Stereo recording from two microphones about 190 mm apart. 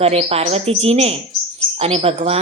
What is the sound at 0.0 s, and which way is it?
Speech, 30° right (ahead or behind).